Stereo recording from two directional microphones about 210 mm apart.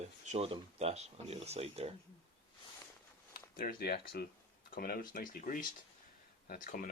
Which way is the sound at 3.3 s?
45° left (ahead or behind).